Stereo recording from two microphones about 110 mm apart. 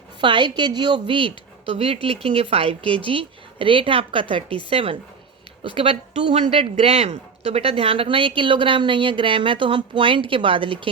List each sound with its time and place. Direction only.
0.2 s a woman's voice: 45° right (ahead or behind)